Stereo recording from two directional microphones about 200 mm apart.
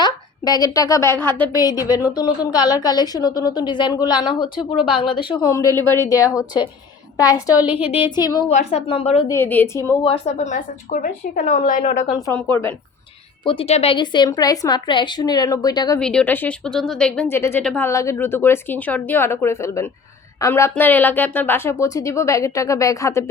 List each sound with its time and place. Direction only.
0.0 s a woman's voice: 20° left (ahead or behind)
9.3 s speech: 10° left (ahead or behind)
10.0 s a woman's voice: 30° left (ahead or behind)
12.1 s speech: 15° left (ahead or behind)
13.4 s a woman's voice: 25° left (ahead or behind)
16.0 s speech: 5° left (ahead or behind)